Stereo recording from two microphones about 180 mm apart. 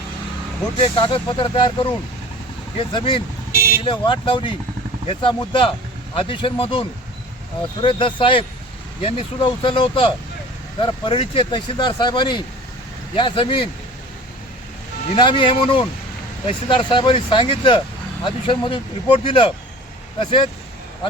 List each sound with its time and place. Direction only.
0.8 s speech: 30° left (ahead or behind)
3.5 s vehicle: 55° left (ahead or behind)
3.8 s speech: 25° left (ahead or behind)
15.1 s speech: 25° left (ahead or behind)